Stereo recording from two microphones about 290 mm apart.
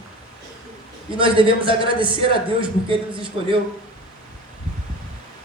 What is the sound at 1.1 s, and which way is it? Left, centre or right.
A man's voice, centre.